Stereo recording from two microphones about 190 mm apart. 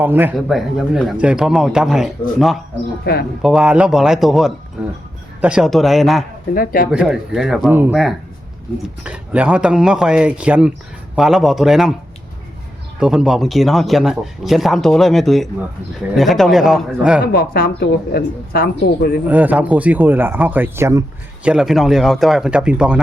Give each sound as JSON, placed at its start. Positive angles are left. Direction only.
{"t": 0.0, "sound": "speech", "side_deg": -10}
{"t": 3.0, "sound": "a woman's voice", "side_deg": 60}
{"t": 3.4, "sound": "speech", "side_deg": -5}
{"t": 6.5, "sound": "speech", "side_deg": 50}
{"t": 6.9, "sound": "speech", "side_deg": -5}
{"t": 13.0, "sound": "speech", "side_deg": -5}
{"t": 17.3, "sound": "a woman's voice", "side_deg": 55}
{"t": 19.3, "sound": "speech", "side_deg": -10}
{"t": 21.4, "sound": "speech", "side_deg": -5}